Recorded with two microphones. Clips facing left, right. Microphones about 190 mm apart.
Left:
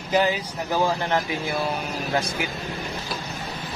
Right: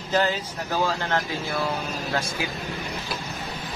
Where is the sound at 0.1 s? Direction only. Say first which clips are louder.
Left 2 dB; 15° left (ahead or behind).